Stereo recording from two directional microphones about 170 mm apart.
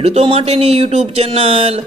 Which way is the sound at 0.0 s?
35° right (ahead or behind).